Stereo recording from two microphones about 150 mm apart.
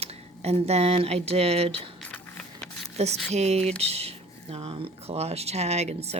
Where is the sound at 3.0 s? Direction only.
45° right (ahead or behind).